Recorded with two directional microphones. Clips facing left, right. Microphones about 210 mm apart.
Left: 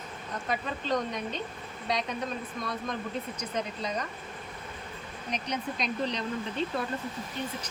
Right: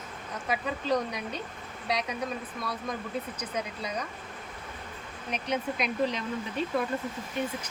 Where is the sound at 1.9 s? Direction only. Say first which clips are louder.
Even; 5° right (ahead or behind).